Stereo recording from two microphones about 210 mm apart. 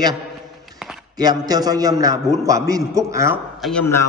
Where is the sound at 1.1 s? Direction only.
20° right (ahead or behind).